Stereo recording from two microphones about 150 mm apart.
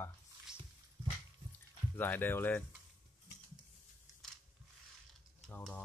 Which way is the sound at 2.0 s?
15° left (ahead or behind).